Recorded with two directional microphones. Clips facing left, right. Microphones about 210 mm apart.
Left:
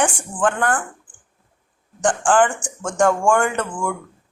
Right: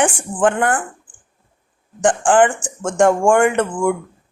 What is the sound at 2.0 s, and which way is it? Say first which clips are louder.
A woman's voice: right 3 dB; 25° right (ahead or behind).